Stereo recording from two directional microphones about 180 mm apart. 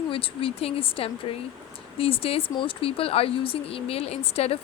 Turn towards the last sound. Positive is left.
turn(degrees=35)  # may be behind; listen again after turning